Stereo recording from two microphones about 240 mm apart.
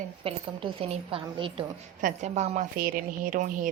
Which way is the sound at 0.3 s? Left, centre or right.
Right.